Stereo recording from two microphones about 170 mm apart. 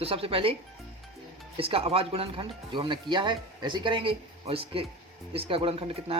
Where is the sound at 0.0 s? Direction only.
35° right (ahead or behind).